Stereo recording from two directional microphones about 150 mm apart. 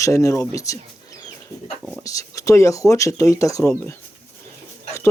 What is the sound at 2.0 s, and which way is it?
Speech, 20° left (ahead or behind).